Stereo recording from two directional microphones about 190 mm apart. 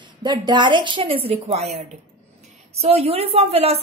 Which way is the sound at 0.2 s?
25° right (ahead or behind).